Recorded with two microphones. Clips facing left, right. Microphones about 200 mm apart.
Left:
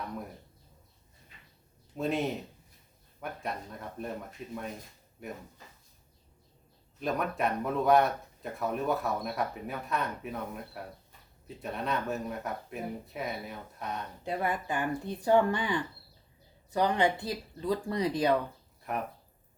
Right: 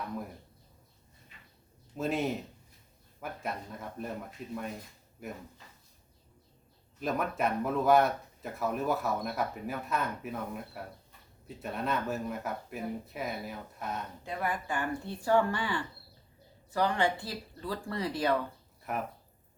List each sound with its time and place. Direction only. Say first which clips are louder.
2.0 s speech: even; centre (ahead or behind)
7.0 s speech: even; centre (ahead or behind)
14.3 s speech: left 3 dB; 25° left (ahead or behind)
18.9 s speech: left 1 dB; centre (ahead or behind)